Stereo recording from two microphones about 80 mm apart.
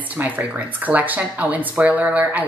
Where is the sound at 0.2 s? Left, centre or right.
Centre.